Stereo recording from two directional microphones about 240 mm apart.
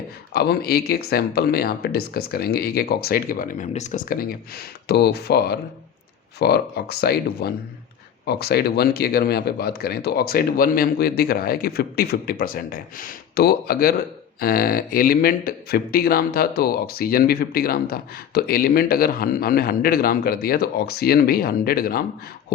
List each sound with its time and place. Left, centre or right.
0.3 s a man's voice: left